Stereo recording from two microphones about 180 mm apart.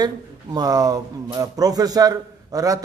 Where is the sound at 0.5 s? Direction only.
20° right (ahead or behind).